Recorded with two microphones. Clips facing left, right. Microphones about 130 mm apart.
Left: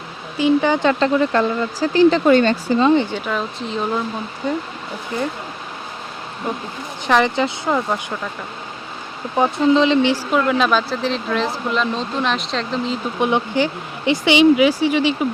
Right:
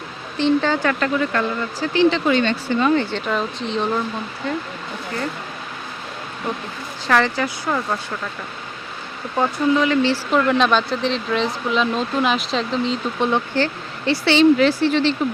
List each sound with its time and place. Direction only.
0.3 s speech: 10° left (ahead or behind); by 2.8 s 40° left (ahead or behind)
2.8 s speech: 20° left (ahead or behind)
3.2 s speech: centre (ahead or behind)
4.4 s speech: 15° left (ahead or behind)
7.0 s speech: 20° left (ahead or behind)
9.4 s speech: 25° left (ahead or behind)
10.3 s speech: 5° left (ahead or behind)
13.1 s speech: 15° left (ahead or behind)